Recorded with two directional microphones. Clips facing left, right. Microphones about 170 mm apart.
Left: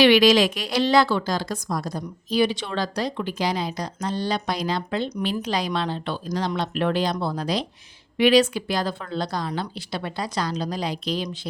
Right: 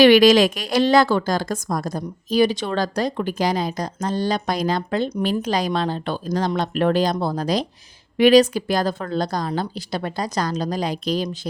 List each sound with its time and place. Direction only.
0.0 s speech: 45° right (ahead or behind)